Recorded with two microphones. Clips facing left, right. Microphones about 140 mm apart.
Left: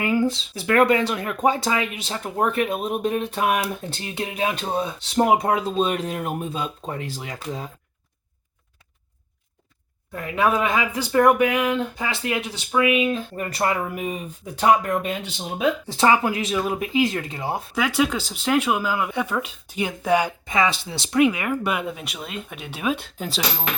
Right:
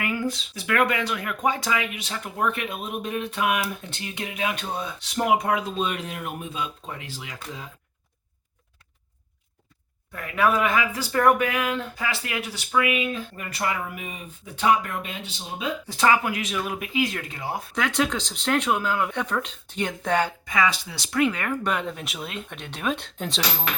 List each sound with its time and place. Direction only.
0.0 s speech: 25° left (ahead or behind)
10.1 s speech: 25° left (ahead or behind); by 15.1 s 45° left (ahead or behind)
15.9 s speech: 30° left (ahead or behind)
17.7 s speech: 5° left (ahead or behind)
20.4 s speech: 25° left (ahead or behind); by 23.6 s 5° left (ahead or behind)